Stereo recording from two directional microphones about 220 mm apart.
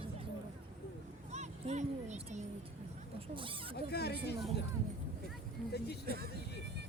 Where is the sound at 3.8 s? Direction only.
45° left (ahead or behind).